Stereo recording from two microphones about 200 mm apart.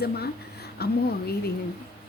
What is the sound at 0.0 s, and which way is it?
Speech, 50° left (ahead or behind).